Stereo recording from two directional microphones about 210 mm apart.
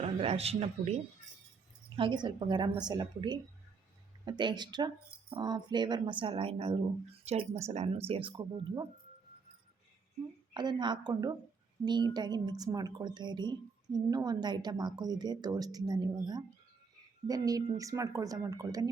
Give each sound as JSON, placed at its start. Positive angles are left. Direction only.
{"t": 0.0, "sound": "speech", "side_deg": -30}
{"t": 2.0, "sound": "speech", "side_deg": -20}
{"t": 10.5, "sound": "speech", "side_deg": -20}